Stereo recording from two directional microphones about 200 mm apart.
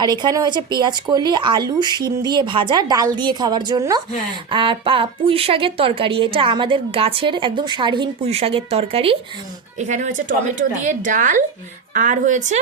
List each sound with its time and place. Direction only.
0.0 s a woman's voice: 20° right (ahead or behind); by 12.5 s 40° right (ahead or behind)